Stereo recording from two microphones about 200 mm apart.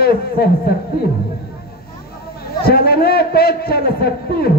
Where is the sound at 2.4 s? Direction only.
50° left (ahead or behind).